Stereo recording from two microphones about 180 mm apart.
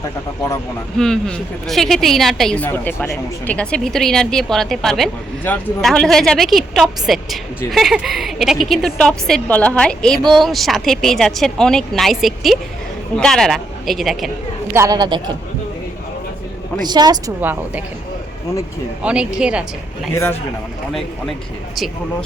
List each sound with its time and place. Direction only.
0.9 s a woman's voice: 5° left (ahead or behind)
14.7 s speech: 20° right (ahead or behind)
16.8 s speech: 25° right (ahead or behind)
17.4 s a woman's voice: 10° right (ahead or behind)
19.0 s a woman's voice: 5° right (ahead or behind)